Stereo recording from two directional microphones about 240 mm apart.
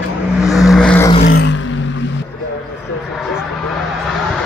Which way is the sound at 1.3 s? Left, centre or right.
Left.